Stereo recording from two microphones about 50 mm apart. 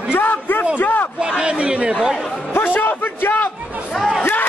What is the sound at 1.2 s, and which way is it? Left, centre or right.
Speech, right.